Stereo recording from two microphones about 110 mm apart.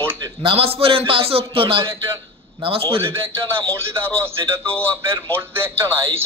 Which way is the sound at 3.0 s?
20° right (ahead or behind).